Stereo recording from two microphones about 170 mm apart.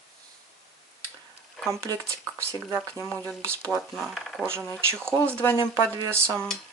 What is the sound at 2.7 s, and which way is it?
Speech, 10° left (ahead or behind).